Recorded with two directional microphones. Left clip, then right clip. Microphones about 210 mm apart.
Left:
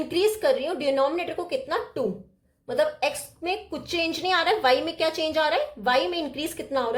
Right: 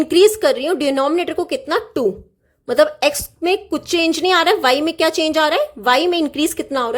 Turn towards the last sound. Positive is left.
turn(degrees=-40)  # may be behind; listen again after turning